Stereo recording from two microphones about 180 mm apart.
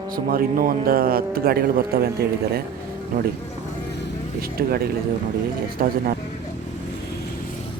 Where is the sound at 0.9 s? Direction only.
55° right (ahead or behind).